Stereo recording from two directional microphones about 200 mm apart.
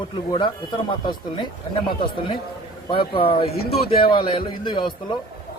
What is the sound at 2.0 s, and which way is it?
A man's voice, 25° left (ahead or behind).